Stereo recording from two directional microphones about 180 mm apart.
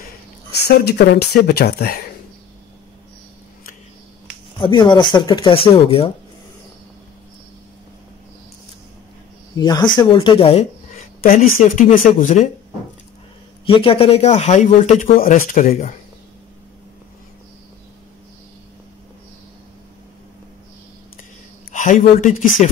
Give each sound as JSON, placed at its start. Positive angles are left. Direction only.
{"t": 0.6, "sound": "speech", "side_deg": 65}
{"t": 4.6, "sound": "speech", "side_deg": 25}
{"t": 9.6, "sound": "speech", "side_deg": 25}
{"t": 11.2, "sound": "speech", "side_deg": 45}
{"t": 13.7, "sound": "speech", "side_deg": 30}
{"t": 21.7, "sound": "speech", "side_deg": 45}